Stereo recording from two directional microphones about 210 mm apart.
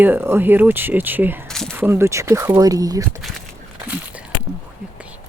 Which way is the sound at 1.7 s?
10° right (ahead or behind).